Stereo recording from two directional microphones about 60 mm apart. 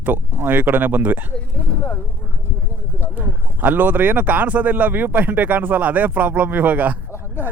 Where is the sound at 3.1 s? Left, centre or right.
Right.